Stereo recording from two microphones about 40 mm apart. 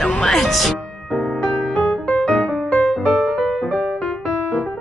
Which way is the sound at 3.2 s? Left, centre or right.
Centre.